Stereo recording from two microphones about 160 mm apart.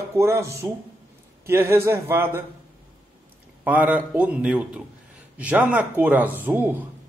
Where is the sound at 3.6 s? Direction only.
10° right (ahead or behind).